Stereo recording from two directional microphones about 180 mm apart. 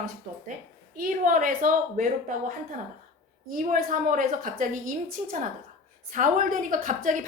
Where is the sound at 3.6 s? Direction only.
50° right (ahead or behind).